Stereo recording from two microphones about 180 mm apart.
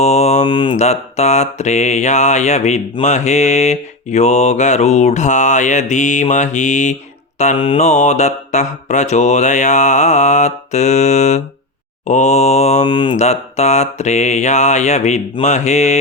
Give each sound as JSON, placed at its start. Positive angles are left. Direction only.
{"t": 0.0, "sound": "mantra", "side_deg": 35}